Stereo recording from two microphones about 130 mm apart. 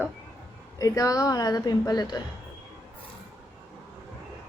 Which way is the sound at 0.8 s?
25° left (ahead or behind).